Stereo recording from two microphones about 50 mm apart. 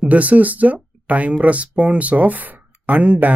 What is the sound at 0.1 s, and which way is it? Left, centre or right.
Speech, right.